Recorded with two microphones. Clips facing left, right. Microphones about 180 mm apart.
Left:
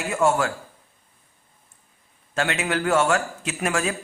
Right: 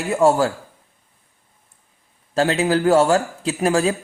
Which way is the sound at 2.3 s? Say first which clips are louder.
Right 7 dB; 35° right (ahead or behind).